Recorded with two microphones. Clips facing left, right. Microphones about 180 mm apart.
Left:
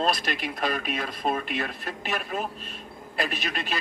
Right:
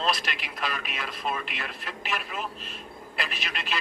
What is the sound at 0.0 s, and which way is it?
A man's voice, 45° left (ahead or behind).